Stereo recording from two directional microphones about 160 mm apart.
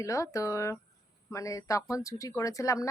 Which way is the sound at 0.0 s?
20° left (ahead or behind).